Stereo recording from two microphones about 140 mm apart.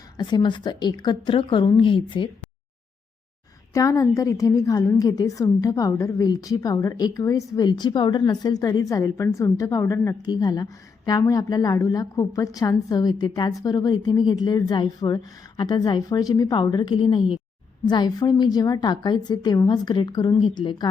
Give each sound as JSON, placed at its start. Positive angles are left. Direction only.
{"t": 0.2, "sound": "a woman's voice", "side_deg": 30}
{"t": 3.8, "sound": "a woman's voice", "side_deg": 25}